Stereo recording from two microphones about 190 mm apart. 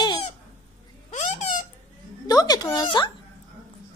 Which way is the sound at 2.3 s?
20° left (ahead or behind).